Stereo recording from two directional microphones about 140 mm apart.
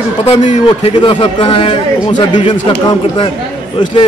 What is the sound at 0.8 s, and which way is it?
A man's voice, 35° left (ahead or behind).